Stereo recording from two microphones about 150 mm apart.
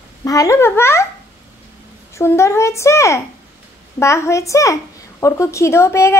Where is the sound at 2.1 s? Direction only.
20° left (ahead or behind).